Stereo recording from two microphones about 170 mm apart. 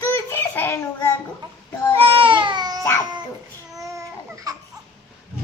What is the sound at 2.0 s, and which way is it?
Baby cry, 30° right (ahead or behind).